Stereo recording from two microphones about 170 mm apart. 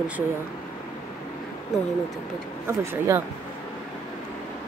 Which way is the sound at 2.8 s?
15° right (ahead or behind).